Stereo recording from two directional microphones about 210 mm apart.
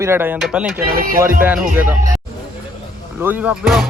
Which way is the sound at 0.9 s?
45° right (ahead or behind).